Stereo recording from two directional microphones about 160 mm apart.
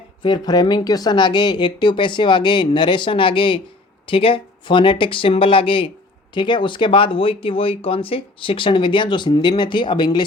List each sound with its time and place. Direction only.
0.2 s speech: 25° left (ahead or behind)